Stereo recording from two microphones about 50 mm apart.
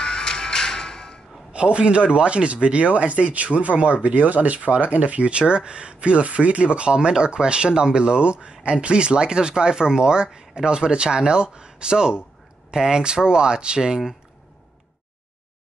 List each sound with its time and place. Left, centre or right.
0.0 s music: centre
1.5 s speech: right